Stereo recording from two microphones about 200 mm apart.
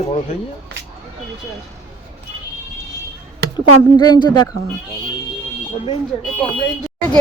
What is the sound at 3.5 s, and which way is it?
A woman's voice, 20° left (ahead or behind).